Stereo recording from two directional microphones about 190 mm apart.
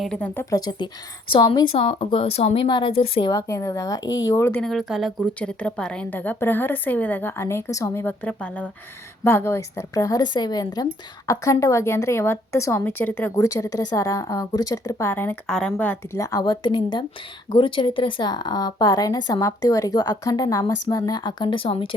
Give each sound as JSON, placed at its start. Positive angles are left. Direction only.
{"t": 0.0, "sound": "speech", "side_deg": 5}
{"t": 0.5, "sound": "a woman's voice", "side_deg": 20}
{"t": 3.3, "sound": "a woman's voice", "side_deg": 15}
{"t": 4.6, "sound": "a woman's voice", "side_deg": 0}